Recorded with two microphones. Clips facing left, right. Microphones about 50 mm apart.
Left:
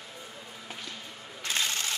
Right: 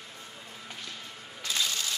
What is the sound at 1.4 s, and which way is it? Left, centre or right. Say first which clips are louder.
Shuffling cards: left 1 dB; left.